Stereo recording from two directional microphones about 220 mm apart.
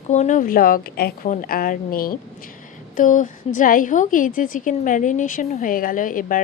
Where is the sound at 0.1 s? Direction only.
35° left (ahead or behind).